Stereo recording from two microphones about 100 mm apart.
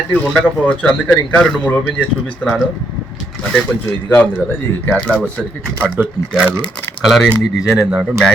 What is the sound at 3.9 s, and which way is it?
Speech, 15° left (ahead or behind).